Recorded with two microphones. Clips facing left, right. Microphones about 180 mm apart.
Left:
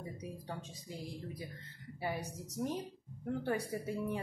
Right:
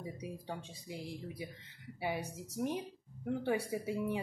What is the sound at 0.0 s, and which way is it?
Speech, 15° right (ahead or behind).